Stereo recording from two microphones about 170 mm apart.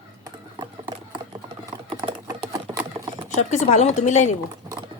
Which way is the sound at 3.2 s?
45° left (ahead or behind).